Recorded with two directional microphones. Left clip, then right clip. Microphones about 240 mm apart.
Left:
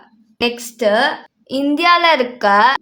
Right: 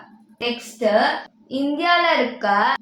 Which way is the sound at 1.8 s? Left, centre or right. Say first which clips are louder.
Left 5 dB; left.